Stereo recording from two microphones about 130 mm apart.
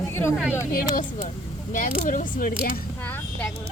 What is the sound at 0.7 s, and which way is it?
Speech, 90° left.